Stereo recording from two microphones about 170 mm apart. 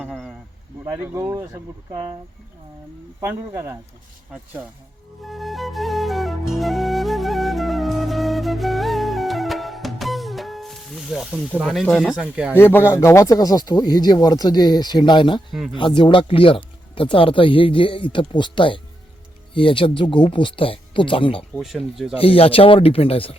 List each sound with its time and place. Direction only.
0.0 s a sound: 5° right (ahead or behind)
0.9 s speech: 15° right (ahead or behind)
3.2 s speech: 15° right (ahead or behind)
5.2 s flute: centre (ahead or behind)
12.2 s speech: 5° right (ahead or behind)
12.5 s speech: 15° left (ahead or behind); by 21.4 s 30° left (ahead or behind)
21.5 s speech: centre (ahead or behind)
22.2 s speech: 35° left (ahead or behind)